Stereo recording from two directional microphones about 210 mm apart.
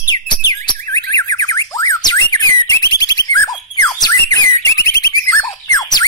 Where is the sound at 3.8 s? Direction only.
15° left (ahead or behind).